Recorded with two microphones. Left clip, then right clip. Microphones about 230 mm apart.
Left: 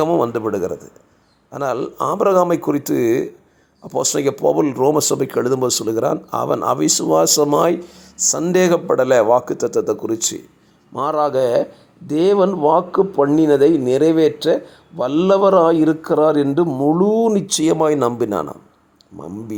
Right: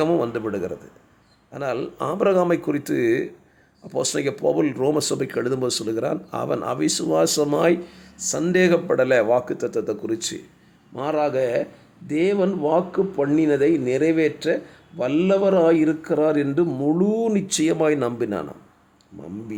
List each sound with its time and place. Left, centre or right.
0.0 s speech: centre
10.9 s speech: centre
12.5 s speech: centre
13.3 s speech: centre
16.6 s speech: centre